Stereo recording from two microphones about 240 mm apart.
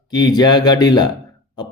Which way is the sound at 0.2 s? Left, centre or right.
Centre.